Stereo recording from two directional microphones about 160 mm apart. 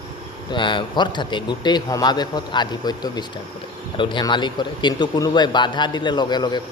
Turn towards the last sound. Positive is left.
turn(degrees=25)  # may be behind; listen again after turning